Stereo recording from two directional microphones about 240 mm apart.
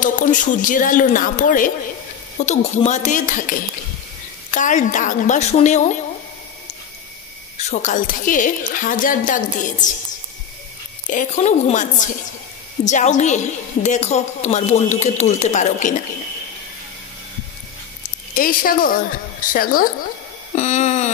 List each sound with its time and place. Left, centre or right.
0.0 s a woman's voice: left
7.5 s a woman's voice: left
11.1 s a woman's voice: left
18.3 s a woman's voice: left